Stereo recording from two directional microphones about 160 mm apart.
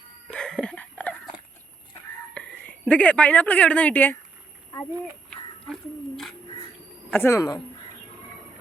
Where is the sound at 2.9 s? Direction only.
5° left (ahead or behind).